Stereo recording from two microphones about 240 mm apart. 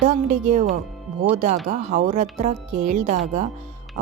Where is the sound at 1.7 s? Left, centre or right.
Right.